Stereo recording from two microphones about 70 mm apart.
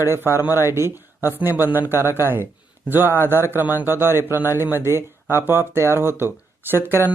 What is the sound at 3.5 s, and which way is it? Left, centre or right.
Speech, right.